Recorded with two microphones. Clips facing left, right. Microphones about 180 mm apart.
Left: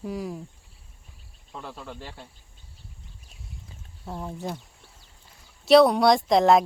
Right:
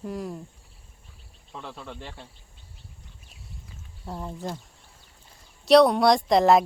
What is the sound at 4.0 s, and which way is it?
Speech, centre (ahead or behind).